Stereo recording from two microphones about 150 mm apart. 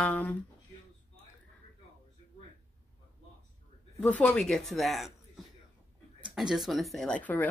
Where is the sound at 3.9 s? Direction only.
10° left (ahead or behind).